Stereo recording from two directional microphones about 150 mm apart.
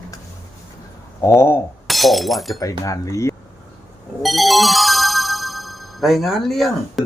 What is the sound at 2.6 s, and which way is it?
Speech, 20° left (ahead or behind).